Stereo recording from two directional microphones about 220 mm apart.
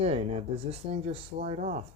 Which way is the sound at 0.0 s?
25° right (ahead or behind).